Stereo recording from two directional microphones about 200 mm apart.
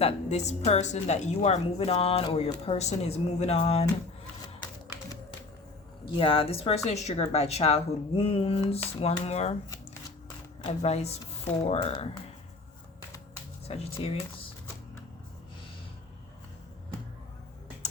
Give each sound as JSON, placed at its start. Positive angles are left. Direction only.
{"t": 0.0, "sound": "a woman's voice", "side_deg": 35}
{"t": 6.1, "sound": "a woman's voice", "side_deg": 25}
{"t": 10.6, "sound": "a woman's voice", "side_deg": 30}
{"t": 13.7, "sound": "speech", "side_deg": 30}